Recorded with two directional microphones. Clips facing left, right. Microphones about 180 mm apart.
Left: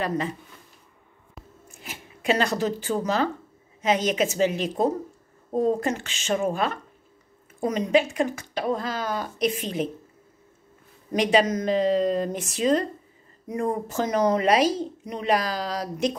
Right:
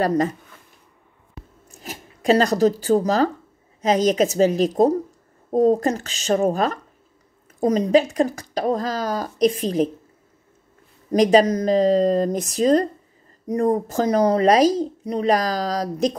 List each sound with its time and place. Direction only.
0.0 s speech: 40° right (ahead or behind)
1.7 s speech: 40° right (ahead or behind)
11.1 s speech: 40° right (ahead or behind)